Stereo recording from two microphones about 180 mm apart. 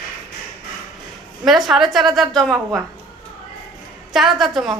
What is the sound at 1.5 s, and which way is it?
Speech, centre (ahead or behind).